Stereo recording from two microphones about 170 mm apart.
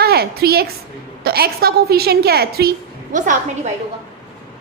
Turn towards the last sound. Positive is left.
turn(degrees=-50)  # may be behind; listen again after turning